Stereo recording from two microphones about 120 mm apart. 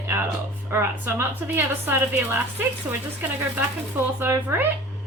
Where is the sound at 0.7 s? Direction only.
20° right (ahead or behind).